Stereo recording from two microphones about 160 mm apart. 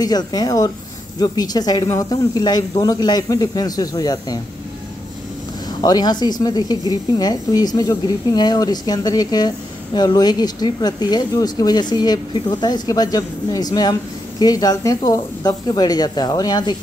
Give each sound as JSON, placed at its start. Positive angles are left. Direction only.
{"t": 0.0, "sound": "speech", "side_deg": 25}
{"t": 5.8, "sound": "speech", "side_deg": 25}